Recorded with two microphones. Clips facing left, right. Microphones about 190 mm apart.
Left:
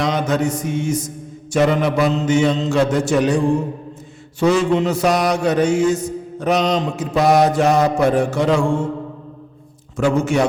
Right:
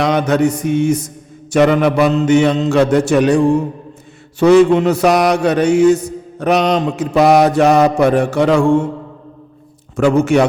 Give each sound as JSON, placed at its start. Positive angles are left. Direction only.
{"t": 0.0, "sound": "a man's voice", "side_deg": -65}
{"t": 4.4, "sound": "mantra", "side_deg": -65}
{"t": 10.0, "sound": "a man's voice", "side_deg": -65}